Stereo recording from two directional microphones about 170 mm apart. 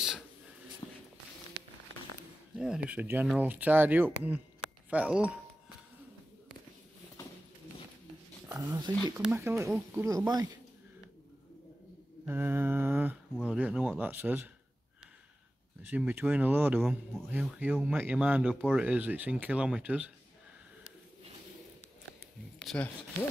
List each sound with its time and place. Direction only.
2.5 s speech: 5° right (ahead or behind)
8.5 s speech: 20° right (ahead or behind)
12.3 s speech: 15° right (ahead or behind)
15.8 s speech: 10° right (ahead or behind)